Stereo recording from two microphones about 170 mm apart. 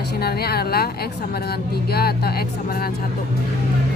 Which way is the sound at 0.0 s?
70° left (ahead or behind).